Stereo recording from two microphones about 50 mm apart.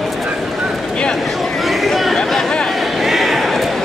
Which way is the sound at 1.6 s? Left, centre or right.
Centre.